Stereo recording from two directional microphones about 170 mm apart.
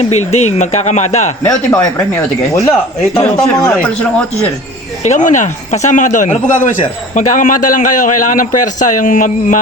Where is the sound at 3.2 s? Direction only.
15° left (ahead or behind).